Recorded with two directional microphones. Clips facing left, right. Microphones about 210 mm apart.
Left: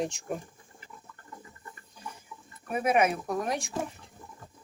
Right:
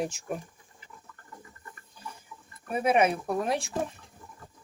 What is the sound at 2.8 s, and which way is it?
Speech, 30° right (ahead or behind).